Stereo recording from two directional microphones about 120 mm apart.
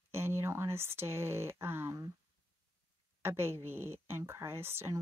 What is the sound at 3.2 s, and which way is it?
A woman's voice, 20° right (ahead or behind).